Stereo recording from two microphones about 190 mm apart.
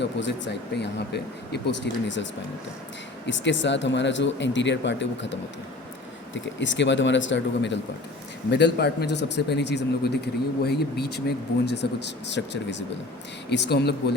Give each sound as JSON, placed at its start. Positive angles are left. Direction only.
{"t": 0.0, "sound": "speech", "side_deg": 70}
{"t": 3.2, "sound": "speech", "side_deg": 75}